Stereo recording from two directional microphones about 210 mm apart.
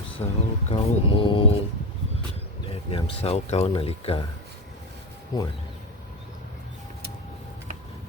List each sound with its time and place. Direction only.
0.2 s speech: 20° left (ahead or behind)
2.9 s speech: 25° left (ahead or behind)
5.3 s speech: 15° left (ahead or behind)